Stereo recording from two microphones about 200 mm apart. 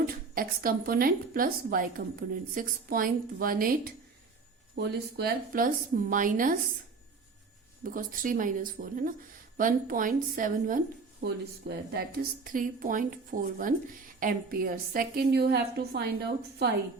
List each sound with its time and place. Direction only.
0.1 s a woman's voice: 45° right (ahead or behind)
7.9 s a woman's voice: 45° right (ahead or behind)
11.2 s a woman's voice: 55° right (ahead or behind)